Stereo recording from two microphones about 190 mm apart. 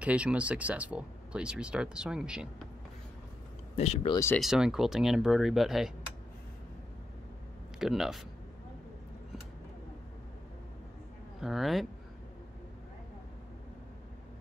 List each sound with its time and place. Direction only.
0.0 s speech: 5° right (ahead or behind)
3.7 s speech: 35° left (ahead or behind)
4.4 s speech: centre (ahead or behind)
7.8 s speech: centre (ahead or behind)
11.4 s speech: centre (ahead or behind)